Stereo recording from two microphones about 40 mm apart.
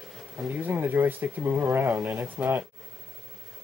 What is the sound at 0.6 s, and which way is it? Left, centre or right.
Speech, right.